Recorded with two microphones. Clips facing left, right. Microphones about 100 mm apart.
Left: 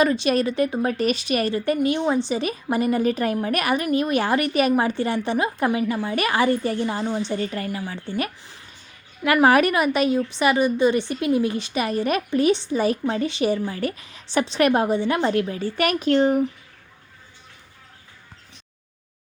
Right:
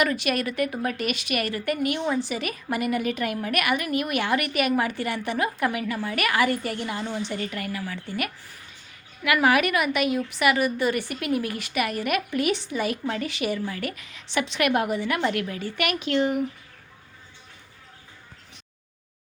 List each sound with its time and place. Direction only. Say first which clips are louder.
0.0 s a woman's voice: left 5 dB; 30° left (ahead or behind)
9.2 s a woman's voice: left 4 dB; 35° left (ahead or behind)